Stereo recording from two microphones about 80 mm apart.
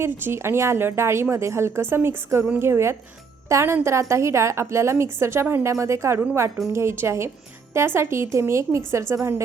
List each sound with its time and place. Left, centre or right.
0.0 s speech: right